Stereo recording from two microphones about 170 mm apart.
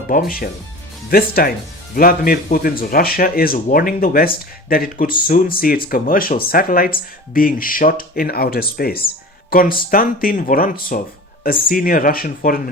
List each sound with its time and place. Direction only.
0.1 s speech: 60° left (ahead or behind)